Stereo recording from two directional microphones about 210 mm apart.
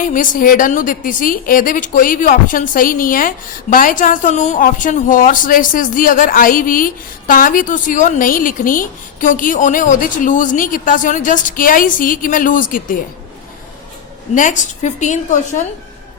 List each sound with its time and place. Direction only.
0.0 s a woman's voice: 40° left (ahead or behind)
14.3 s a woman's voice: 35° left (ahead or behind)